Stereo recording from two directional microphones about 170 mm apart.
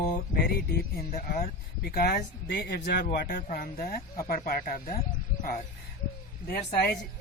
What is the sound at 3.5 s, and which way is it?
Speech, 60° left (ahead or behind).